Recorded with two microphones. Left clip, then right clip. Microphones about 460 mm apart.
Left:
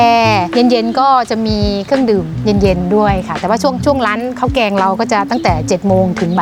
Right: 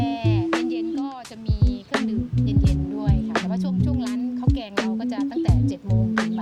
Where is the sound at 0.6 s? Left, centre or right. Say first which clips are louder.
Left 17 dB; left.